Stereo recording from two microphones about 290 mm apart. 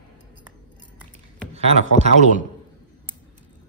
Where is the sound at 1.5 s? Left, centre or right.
Right.